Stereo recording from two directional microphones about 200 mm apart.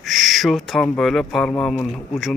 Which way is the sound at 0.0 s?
Centre (ahead or behind).